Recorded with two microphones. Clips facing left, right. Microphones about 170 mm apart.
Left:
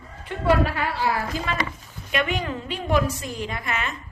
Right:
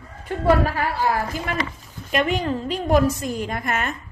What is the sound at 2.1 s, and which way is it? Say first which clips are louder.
A woman's voice: right 4 dB; 35° right (ahead or behind).